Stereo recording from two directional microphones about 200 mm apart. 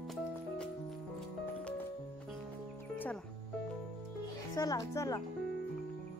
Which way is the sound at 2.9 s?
10° left (ahead or behind).